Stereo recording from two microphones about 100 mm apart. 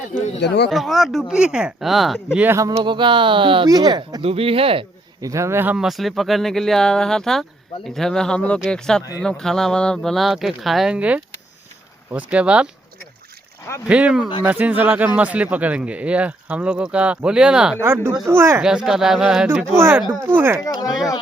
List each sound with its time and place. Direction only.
0.7 s speech: centre (ahead or behind)
2.8 s speech: 55° right (ahead or behind)
3.7 s speech: 40° right (ahead or behind)
4.2 s speech: 70° right (ahead or behind)
5.2 s speech: 30° right (ahead or behind)
5.7 s speech: 5° right (ahead or behind)
13.8 s speech: 15° right (ahead or behind)
17.7 s speech: 25° right (ahead or behind)
18.6 s speech: 5° right (ahead or behind)
19.5 s speech: 25° right (ahead or behind)
20.6 s speech: 40° left (ahead or behind)